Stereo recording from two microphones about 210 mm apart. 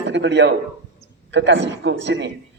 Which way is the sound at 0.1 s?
55° right (ahead or behind).